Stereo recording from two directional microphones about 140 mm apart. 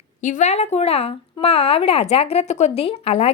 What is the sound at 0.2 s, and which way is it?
A woman's voice, 65° left (ahead or behind).